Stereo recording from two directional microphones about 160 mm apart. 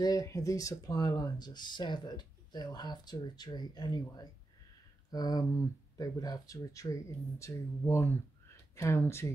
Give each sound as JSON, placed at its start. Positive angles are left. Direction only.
{"t": 0.0, "sound": "speech", "side_deg": 20}